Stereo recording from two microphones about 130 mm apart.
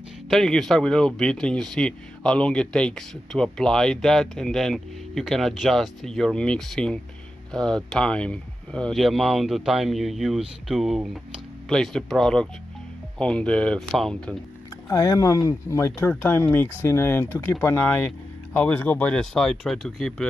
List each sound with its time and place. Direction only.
0.3 s speech: 5° left (ahead or behind)
14.9 s speech: 25° left (ahead or behind); by 20.2 s 5° left (ahead or behind)